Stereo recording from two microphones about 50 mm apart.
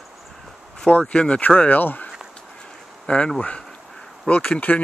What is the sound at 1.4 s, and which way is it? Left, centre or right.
Speech, left.